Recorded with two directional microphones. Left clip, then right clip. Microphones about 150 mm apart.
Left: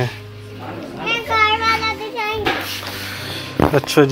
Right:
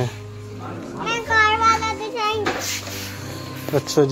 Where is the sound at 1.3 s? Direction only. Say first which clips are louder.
Left 1 dB; 15° left (ahead or behind).